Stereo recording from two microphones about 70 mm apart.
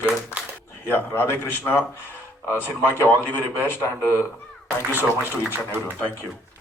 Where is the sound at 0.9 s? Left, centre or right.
Left.